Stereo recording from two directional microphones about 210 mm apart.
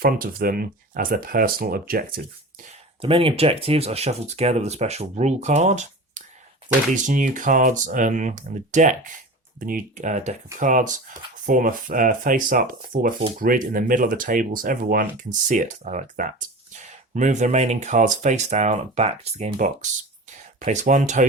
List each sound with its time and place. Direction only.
0.0 s speech: 45° right (ahead or behind)
3.0 s speech: 25° right (ahead or behind)